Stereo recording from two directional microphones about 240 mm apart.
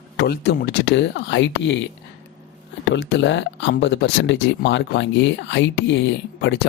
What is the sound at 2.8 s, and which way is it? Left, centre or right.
Speech, left.